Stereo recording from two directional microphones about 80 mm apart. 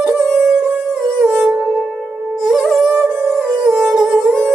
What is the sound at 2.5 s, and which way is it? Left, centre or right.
Music, centre.